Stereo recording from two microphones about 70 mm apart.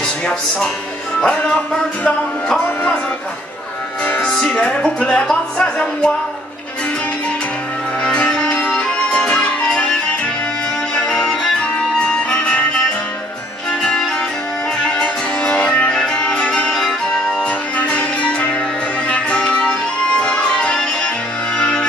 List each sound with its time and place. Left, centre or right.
0.0 s speech: centre
2.0 s music: centre
4.2 s speech: centre
8.0 s music: centre
11.2 s music: centre
13.7 s music: centre